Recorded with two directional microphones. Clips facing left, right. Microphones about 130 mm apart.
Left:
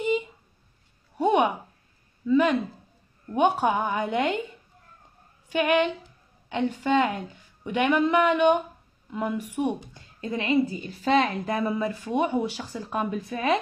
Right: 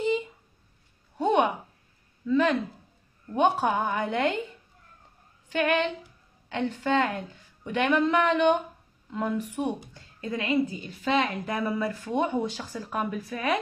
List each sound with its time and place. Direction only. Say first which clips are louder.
1.1 s a sound: left 2 dB; 10° left (ahead or behind)
2.2 s a woman's voice: left 2 dB; 15° left (ahead or behind)
5.5 s a woman's voice: left 3 dB; 15° left (ahead or behind)
12.9 s a woman's voice: left 2 dB; 25° left (ahead or behind)